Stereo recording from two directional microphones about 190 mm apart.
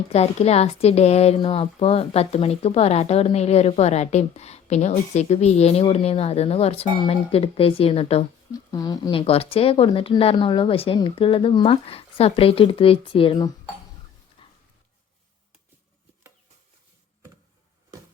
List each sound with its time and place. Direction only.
0.1 s speech: 35° left (ahead or behind)
8.5 s speech: 20° left (ahead or behind)
14.4 s a sound: 25° left (ahead or behind)